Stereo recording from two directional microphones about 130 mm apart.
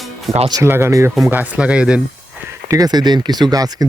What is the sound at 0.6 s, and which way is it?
Speech, 20° right (ahead or behind).